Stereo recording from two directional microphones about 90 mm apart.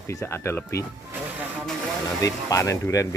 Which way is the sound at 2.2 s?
35° left (ahead or behind).